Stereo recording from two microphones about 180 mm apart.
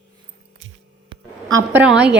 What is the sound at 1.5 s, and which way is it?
Speech, 20° right (ahead or behind).